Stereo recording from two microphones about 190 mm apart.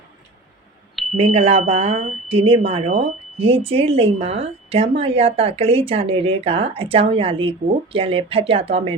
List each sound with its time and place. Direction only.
1.1 s speech: 35° right (ahead or behind)